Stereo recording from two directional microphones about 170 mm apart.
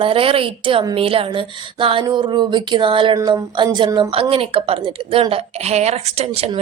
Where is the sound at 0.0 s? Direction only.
30° right (ahead or behind).